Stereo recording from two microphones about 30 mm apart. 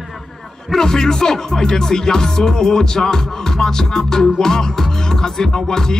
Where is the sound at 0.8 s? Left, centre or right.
Centre.